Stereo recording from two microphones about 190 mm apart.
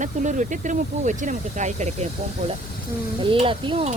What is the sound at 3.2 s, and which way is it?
Speech, 25° right (ahead or behind).